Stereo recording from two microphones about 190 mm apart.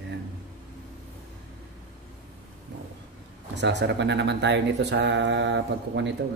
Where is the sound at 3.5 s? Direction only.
65° right (ahead or behind).